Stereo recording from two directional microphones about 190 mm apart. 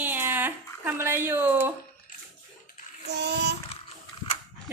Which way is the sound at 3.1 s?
65° right (ahead or behind).